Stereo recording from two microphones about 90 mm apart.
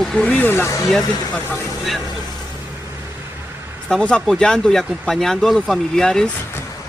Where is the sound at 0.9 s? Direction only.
5° left (ahead or behind).